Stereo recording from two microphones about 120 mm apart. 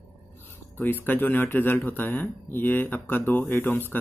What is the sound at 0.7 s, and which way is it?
Speech, 15° left (ahead or behind).